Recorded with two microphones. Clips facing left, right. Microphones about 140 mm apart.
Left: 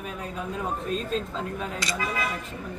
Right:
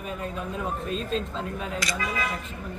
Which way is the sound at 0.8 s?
Centre (ahead or behind).